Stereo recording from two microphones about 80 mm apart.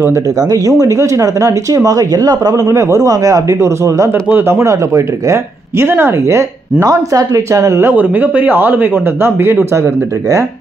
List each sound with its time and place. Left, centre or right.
0.4 s speech: right
4.1 s speech: right
7.8 s a man's voice: right